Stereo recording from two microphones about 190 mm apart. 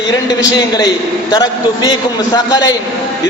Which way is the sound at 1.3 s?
20° left (ahead or behind).